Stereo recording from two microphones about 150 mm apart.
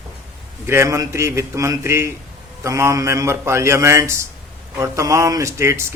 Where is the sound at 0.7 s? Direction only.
20° right (ahead or behind).